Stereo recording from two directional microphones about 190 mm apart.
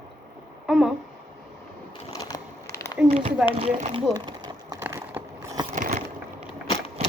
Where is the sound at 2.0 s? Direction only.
20° left (ahead or behind).